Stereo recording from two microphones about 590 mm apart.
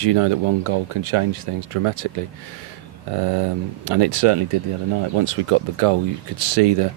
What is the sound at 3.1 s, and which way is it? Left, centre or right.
Speech, right.